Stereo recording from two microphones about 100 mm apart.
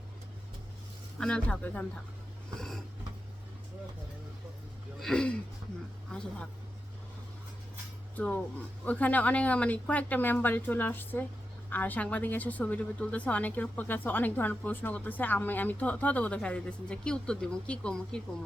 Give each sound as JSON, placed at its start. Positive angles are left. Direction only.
{"t": 1.2, "sound": "a woman's voice", "side_deg": 10}
{"t": 4.9, "sound": "speech", "side_deg": 5}
{"t": 8.1, "sound": "a woman's voice", "side_deg": 15}